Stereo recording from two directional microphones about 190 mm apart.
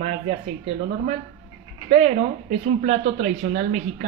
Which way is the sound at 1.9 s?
35° right (ahead or behind).